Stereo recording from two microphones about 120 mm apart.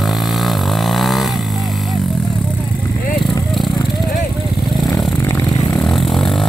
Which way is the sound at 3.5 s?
Centre (ahead or behind).